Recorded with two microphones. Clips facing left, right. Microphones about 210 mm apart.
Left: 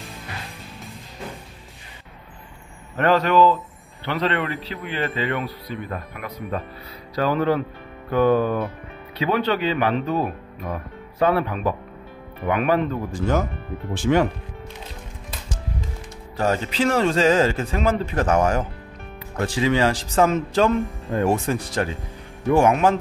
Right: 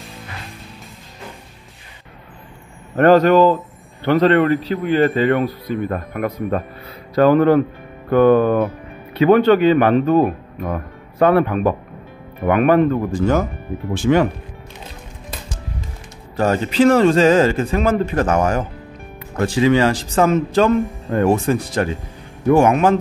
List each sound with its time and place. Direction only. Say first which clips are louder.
3.0 s a man's voice: right 6 dB; 45° right (ahead or behind)
14.1 s speech: right 4 dB; 90° right
16.3 s a man's voice: right 6 dB; 55° right (ahead or behind)